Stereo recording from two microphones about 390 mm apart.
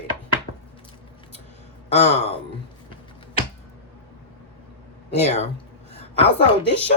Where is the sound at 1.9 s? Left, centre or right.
Centre.